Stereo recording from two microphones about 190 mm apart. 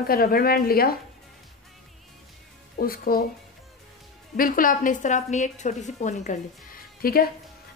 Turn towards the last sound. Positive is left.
turn(degrees=50)  # may be behind; listen again after turning